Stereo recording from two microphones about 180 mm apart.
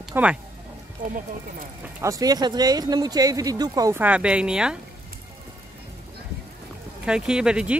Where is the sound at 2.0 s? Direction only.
20° right (ahead or behind).